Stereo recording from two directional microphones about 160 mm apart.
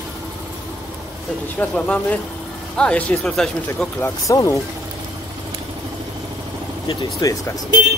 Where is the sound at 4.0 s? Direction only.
20° left (ahead or behind).